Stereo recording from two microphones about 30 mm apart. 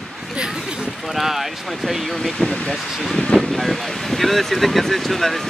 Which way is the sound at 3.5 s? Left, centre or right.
Centre.